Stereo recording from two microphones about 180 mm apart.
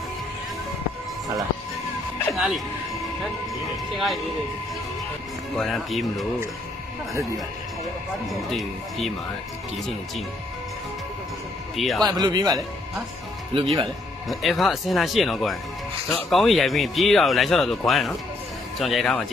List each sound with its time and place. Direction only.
2.3 s speech: 5° right (ahead or behind)
3.9 s speech: centre (ahead or behind)
5.6 s speech: centre (ahead or behind)
8.3 s speech: centre (ahead or behind)
11.7 s speech: centre (ahead or behind)
12.1 s speech: 20° right (ahead or behind)
14.2 s speech: centre (ahead or behind)